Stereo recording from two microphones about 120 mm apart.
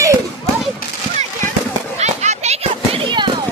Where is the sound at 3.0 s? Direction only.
40° right (ahead or behind).